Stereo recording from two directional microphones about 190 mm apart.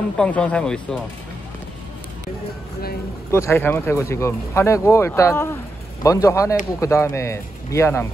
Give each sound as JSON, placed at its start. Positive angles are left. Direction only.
{"t": 0.2, "sound": "speech", "side_deg": 5}
{"t": 3.3, "sound": "speech", "side_deg": 15}